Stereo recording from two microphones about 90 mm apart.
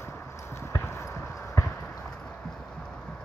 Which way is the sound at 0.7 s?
30° left (ahead or behind).